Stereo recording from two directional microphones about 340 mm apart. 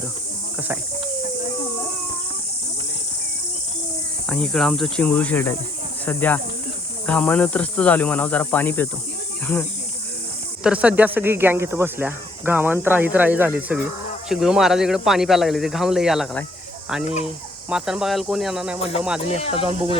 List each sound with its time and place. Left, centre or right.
4.3 s speech: centre
10.6 s speech: centre
17.7 s speech: centre
18.8 s speech: centre